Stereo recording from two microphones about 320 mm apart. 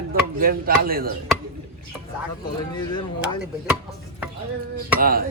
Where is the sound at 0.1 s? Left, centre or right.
Right.